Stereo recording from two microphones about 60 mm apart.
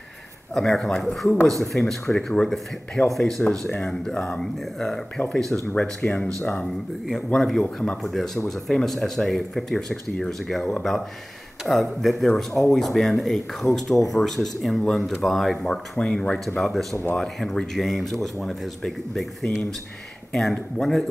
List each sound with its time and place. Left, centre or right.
0.6 s speech: centre
3.8 s speech: centre
5.8 s speech: left; by 7.6 s centre
7.6 s speech: centre
8.0 s speech: centre